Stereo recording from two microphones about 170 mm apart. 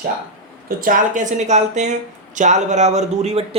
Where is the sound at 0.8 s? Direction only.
55° right (ahead or behind).